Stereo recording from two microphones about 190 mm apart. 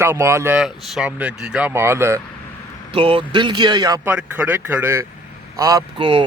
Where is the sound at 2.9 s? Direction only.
25° right (ahead or behind).